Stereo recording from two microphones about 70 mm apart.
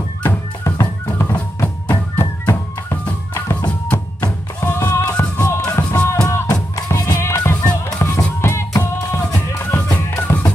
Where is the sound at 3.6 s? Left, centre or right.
Centre.